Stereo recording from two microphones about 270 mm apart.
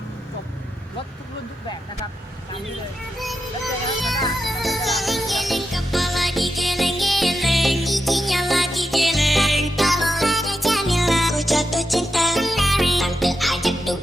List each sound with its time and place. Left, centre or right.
4.4 s music: centre